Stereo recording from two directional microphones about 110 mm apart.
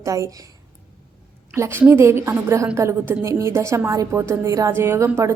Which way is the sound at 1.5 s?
25° right (ahead or behind).